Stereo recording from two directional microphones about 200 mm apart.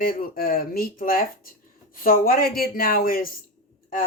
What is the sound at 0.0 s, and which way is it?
Speech, 45° left (ahead or behind).